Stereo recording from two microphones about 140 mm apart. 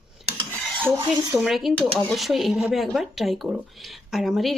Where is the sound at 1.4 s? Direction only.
Centre (ahead or behind).